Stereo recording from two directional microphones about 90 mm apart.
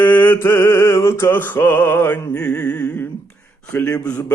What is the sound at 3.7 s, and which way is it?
Speech, 20° left (ahead or behind).